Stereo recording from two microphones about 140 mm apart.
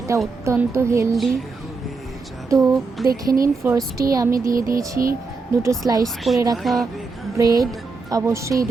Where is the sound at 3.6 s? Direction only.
20° right (ahead or behind).